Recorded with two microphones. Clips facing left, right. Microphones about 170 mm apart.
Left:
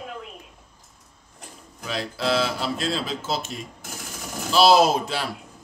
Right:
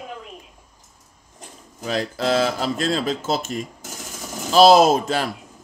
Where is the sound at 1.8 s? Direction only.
45° right (ahead or behind).